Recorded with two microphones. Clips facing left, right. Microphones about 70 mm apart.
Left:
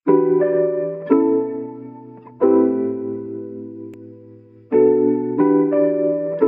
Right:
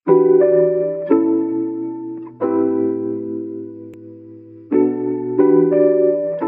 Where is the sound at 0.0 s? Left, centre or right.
Centre.